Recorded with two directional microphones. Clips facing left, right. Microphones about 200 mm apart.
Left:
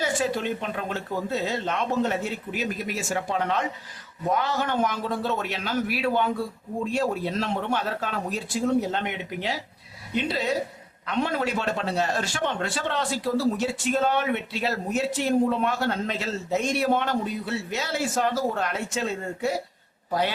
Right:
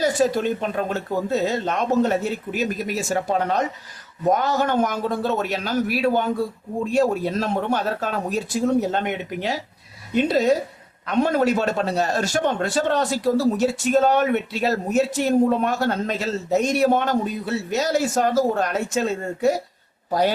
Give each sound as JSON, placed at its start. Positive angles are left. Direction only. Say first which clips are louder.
{"t": 0.0, "sound": "a man's voice", "louder": "right 6 dB", "side_deg": -40}